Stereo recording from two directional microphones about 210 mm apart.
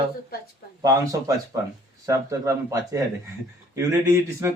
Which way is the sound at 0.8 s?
15° right (ahead or behind).